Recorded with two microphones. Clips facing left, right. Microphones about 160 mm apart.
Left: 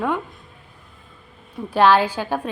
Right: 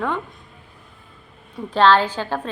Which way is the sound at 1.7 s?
10° left (ahead or behind).